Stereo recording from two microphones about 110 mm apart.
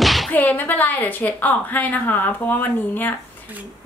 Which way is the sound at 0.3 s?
15° left (ahead or behind).